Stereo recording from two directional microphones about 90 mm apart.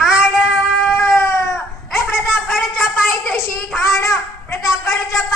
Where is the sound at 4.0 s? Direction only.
40° left (ahead or behind).